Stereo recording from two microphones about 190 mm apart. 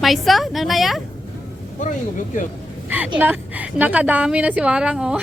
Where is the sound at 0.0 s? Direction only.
Centre (ahead or behind).